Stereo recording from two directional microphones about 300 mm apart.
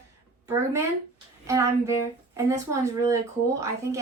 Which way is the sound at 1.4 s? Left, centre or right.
Centre.